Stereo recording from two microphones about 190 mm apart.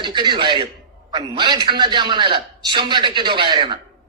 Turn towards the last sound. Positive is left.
turn(degrees=-25)  # may be behind; listen again after turning